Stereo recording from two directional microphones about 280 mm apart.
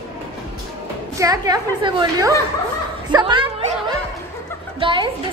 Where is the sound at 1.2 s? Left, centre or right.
Centre.